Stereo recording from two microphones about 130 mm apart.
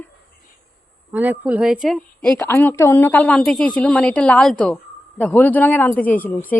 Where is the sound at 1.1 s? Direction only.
10° right (ahead or behind).